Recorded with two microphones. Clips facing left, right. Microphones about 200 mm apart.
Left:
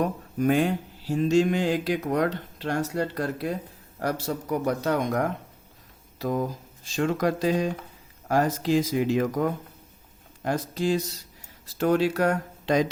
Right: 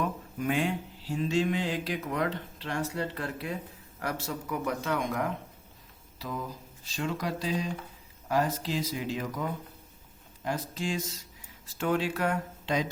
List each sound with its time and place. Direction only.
0.0 s mantra: 40° left (ahead or behind)
4.0 s speech: 40° left (ahead or behind)
6.1 s mantra: 45° left (ahead or behind)
10.4 s speech: 40° left (ahead or behind)